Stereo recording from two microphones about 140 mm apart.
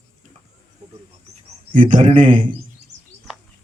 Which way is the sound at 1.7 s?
70° right (ahead or behind).